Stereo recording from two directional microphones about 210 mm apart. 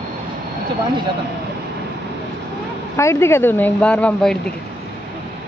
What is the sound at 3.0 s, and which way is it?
Speech, 15° left (ahead or behind).